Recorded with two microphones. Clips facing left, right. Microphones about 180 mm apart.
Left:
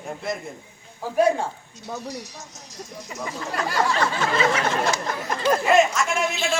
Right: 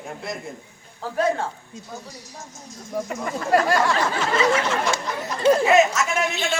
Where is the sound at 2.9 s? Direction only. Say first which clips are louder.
Right 7 dB; 60° right (ahead or behind).